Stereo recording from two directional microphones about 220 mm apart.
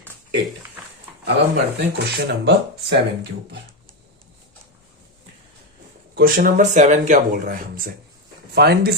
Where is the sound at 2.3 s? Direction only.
50° right (ahead or behind).